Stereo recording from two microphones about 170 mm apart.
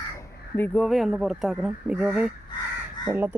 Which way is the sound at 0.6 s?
5° left (ahead or behind).